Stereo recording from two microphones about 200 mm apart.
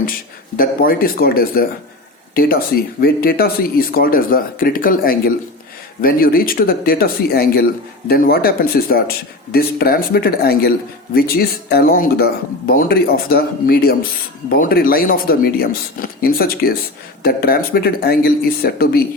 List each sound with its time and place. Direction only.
0.5 s speech: 45° left (ahead or behind)